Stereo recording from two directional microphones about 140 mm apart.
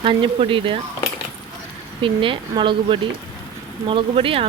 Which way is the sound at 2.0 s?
40° right (ahead or behind).